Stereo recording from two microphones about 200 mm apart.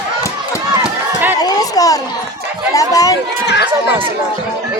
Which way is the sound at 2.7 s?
15° left (ahead or behind).